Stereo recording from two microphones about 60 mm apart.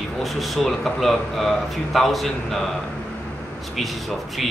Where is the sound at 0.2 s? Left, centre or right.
Centre.